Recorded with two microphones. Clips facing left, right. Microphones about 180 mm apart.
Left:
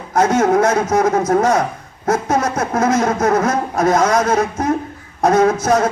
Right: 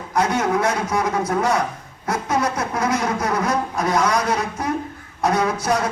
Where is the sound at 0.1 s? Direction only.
45° left (ahead or behind).